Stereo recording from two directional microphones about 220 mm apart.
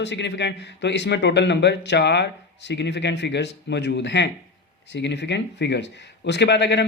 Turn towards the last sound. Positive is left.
turn(degrees=50)  # may be behind; listen again after turning